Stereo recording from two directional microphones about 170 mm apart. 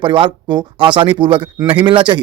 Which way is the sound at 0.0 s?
30° right (ahead or behind).